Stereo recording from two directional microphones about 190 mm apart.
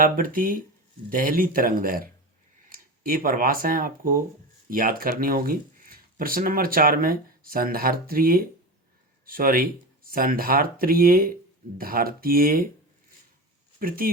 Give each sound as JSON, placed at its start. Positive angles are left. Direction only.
{"t": 0.0, "sound": "speech", "side_deg": -45}
{"t": 13.7, "sound": "speech", "side_deg": -50}